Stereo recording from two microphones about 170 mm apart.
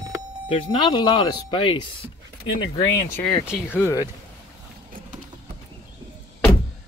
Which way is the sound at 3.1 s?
5° left (ahead or behind).